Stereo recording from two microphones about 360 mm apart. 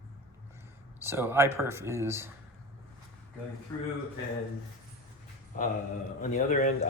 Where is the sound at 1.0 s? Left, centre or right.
Centre.